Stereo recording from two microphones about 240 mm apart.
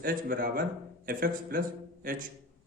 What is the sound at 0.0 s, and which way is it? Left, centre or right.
A man's voice, right.